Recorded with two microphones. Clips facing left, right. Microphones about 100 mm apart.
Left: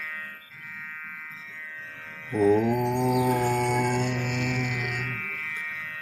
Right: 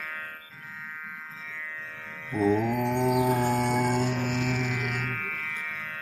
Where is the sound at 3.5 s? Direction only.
40° right (ahead or behind).